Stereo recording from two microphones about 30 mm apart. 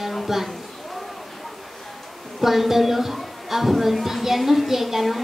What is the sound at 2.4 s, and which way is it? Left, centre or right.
Speech, centre.